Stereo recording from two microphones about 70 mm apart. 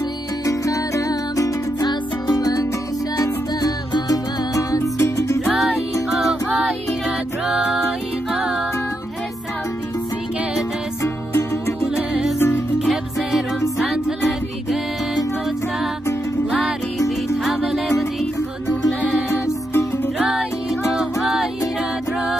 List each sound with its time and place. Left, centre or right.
0.5 s music: left
1.9 s music: left
6.0 s music: centre
11.0 s music: left
11.9 s music: centre
12.4 s music: left
12.7 s music: centre
17.6 s music: centre
19.4 s music: left
20.2 s music: centre